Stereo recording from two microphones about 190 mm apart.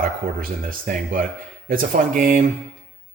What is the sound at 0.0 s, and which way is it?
Speech, 45° right (ahead or behind).